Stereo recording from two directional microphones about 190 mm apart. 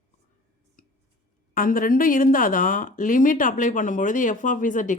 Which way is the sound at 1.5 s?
45° left (ahead or behind).